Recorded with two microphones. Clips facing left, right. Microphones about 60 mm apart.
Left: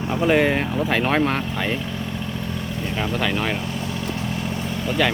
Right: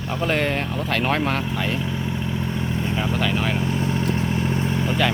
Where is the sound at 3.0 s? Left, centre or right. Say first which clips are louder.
Left 2 dB; centre.